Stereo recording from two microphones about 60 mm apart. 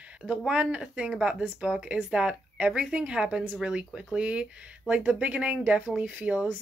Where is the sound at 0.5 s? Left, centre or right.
Right.